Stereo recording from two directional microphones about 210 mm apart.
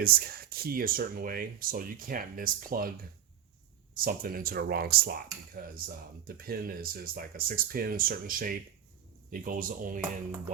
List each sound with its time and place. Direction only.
0.0 s speech: 45° right (ahead or behind)
3.9 s speech: 45° right (ahead or behind)